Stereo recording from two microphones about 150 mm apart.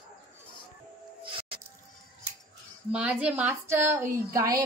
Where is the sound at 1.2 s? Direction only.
35° right (ahead or behind).